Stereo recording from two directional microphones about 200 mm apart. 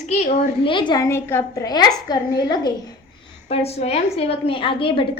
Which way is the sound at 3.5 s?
30° left (ahead or behind).